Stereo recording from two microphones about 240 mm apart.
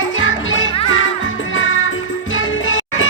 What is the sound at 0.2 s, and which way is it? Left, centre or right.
Music, left.